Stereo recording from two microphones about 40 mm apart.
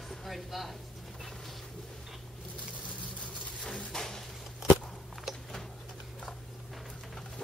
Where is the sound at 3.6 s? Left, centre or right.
Left.